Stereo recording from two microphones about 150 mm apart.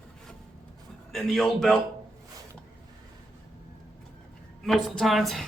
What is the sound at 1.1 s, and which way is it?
Speech, centre (ahead or behind).